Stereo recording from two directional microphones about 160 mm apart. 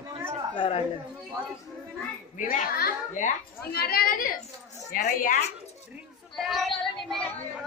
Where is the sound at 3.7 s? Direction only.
75° left (ahead or behind).